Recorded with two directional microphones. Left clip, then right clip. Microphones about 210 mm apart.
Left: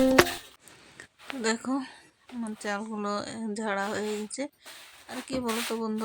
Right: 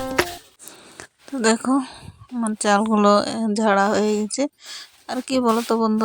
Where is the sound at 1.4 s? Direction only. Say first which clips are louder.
Right 10 dB; 35° right (ahead or behind).